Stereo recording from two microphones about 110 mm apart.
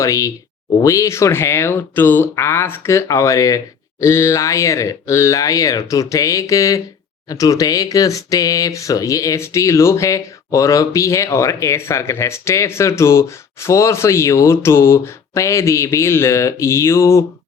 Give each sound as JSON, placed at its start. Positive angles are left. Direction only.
{"t": 0.0, "sound": "speech", "side_deg": 30}